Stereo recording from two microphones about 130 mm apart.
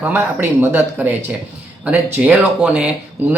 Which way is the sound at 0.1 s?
15° right (ahead or behind).